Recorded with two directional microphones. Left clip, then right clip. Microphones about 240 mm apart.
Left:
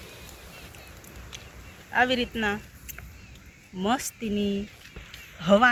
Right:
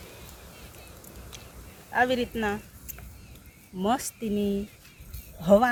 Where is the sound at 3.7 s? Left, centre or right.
Right.